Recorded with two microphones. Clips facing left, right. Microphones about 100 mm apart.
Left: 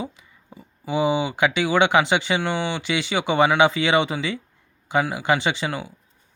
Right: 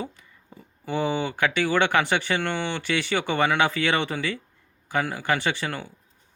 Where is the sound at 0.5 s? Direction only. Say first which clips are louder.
Left 3 dB; 10° left (ahead or behind).